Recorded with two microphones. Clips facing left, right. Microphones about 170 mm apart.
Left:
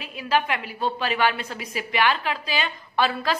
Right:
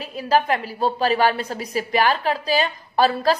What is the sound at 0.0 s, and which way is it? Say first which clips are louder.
A woman's voice: right 4 dB; 40° right (ahead or behind).